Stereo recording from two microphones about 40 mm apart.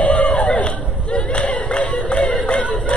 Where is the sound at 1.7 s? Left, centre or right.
Left.